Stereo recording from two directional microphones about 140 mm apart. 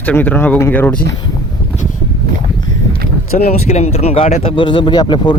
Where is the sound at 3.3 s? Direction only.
60° left (ahead or behind).